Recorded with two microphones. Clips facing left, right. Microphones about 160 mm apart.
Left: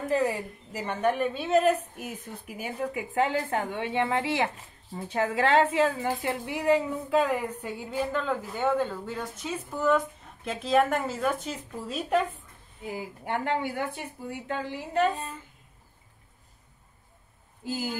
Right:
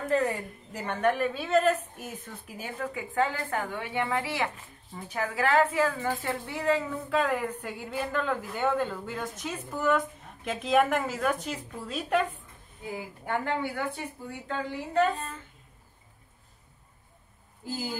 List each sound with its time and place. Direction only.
0.1 s a woman's voice: 10° left (ahead or behind)
12.9 s speech: 20° left (ahead or behind)
17.6 s a woman's voice: 15° left (ahead or behind)